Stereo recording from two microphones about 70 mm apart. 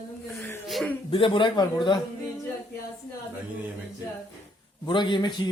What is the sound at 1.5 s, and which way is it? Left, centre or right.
Speech, left.